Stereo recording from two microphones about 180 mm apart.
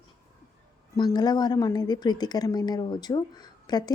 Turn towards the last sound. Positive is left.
turn(degrees=20)  # may be behind; listen again after turning